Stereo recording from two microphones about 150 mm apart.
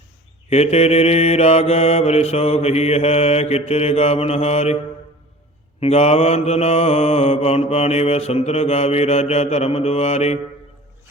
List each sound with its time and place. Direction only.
0.5 s mantra: 45° left (ahead or behind)
5.8 s mantra: 45° left (ahead or behind)